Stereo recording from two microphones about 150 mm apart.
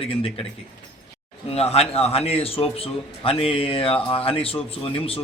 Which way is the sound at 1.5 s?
45° left (ahead or behind).